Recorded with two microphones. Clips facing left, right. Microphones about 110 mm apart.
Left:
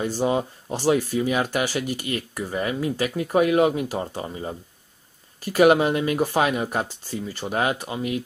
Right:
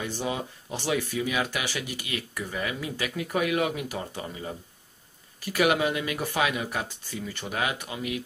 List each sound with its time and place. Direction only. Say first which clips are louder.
0.0 s speech: left 8 dB; 40° left (ahead or behind)
5.4 s speech: left 7 dB; 45° left (ahead or behind)